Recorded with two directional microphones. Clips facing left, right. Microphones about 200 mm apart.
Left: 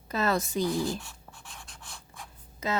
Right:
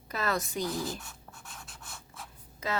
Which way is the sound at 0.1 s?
25° left (ahead or behind).